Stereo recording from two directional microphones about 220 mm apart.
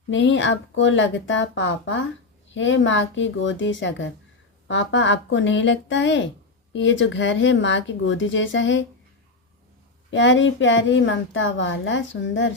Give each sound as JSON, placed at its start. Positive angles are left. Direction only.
{"t": 0.1, "sound": "a woman's voice", "side_deg": 55}
{"t": 10.1, "sound": "a woman's voice", "side_deg": 55}